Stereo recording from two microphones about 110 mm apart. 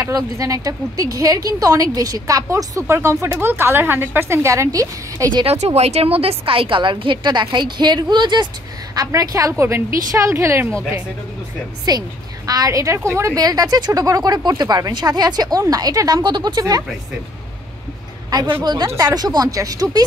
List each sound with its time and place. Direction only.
0.0 s speech: 30° right (ahead or behind)
5.5 s a woman's voice: 70° right (ahead or behind); by 10.8 s 25° right (ahead or behind)
11.9 s a woman's voice: 40° right (ahead or behind)
18.6 s a woman's voice: 40° right (ahead or behind)